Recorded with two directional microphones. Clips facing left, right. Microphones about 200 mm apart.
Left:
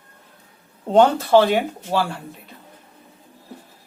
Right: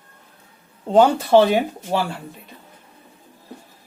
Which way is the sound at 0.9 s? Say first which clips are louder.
Even; 5° right (ahead or behind).